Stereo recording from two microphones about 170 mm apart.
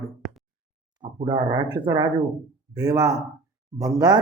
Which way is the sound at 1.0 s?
25° right (ahead or behind).